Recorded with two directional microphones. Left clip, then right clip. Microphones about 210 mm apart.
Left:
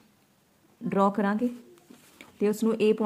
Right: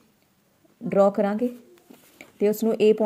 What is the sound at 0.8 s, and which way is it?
A woman's voice, centre (ahead or behind).